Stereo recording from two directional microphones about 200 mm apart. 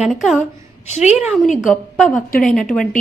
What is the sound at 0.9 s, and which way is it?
Speech, 35° left (ahead or behind).